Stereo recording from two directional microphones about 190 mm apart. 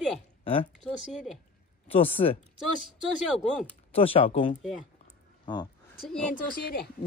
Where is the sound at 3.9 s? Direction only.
30° left (ahead or behind).